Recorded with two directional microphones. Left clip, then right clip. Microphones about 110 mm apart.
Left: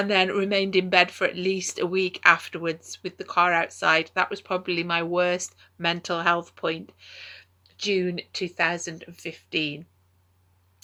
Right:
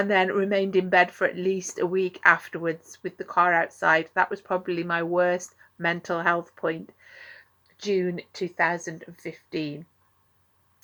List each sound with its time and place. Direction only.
0.0 s speech: 45° left (ahead or behind)
7.9 s speech: 50° left (ahead or behind)